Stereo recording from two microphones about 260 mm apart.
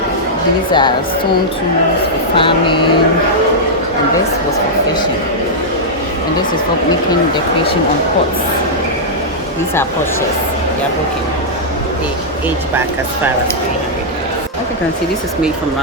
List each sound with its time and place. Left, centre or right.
0.7 s a woman's voice: centre
2.3 s speech: centre